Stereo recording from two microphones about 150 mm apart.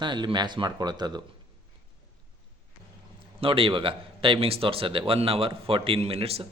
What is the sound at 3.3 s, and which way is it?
A man's voice, 35° right (ahead or behind).